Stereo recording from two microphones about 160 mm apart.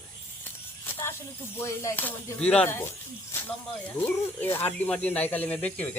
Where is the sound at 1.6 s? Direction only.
15° left (ahead or behind).